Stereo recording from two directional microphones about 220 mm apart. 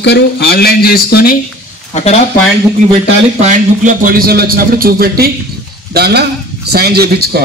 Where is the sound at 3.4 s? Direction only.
35° right (ahead or behind).